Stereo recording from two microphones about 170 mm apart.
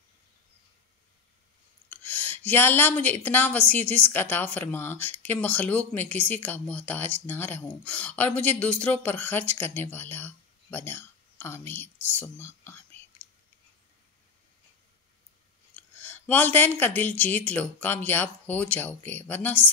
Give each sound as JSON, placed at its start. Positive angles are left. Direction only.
{"t": 1.9, "sound": "a woman's voice", "side_deg": 10}
{"t": 15.7, "sound": "a woman's voice", "side_deg": 10}